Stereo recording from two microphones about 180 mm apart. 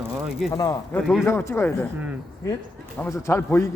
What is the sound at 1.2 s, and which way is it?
Speech, 10° left (ahead or behind).